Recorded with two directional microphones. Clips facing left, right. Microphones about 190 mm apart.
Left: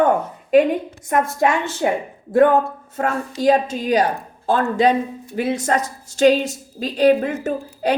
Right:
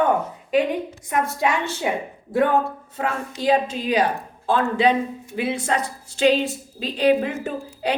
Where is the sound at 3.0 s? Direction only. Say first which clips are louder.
Left 5 dB; 50° left (ahead or behind).